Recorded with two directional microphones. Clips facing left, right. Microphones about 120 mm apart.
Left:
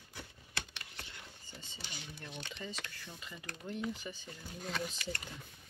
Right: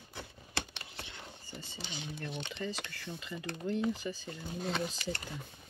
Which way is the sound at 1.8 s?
20° right (ahead or behind).